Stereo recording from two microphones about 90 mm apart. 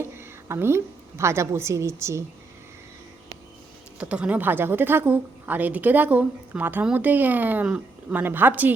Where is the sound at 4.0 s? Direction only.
15° right (ahead or behind).